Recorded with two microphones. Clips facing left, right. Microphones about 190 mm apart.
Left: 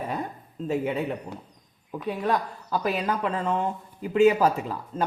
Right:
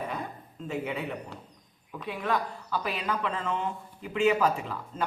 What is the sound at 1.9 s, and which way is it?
A man's voice, 40° left (ahead or behind).